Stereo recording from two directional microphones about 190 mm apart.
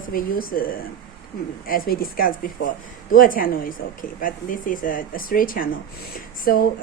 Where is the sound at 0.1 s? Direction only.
50° left (ahead or behind).